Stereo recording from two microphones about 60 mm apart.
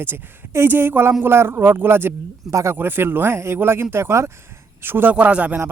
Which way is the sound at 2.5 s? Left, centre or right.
Right.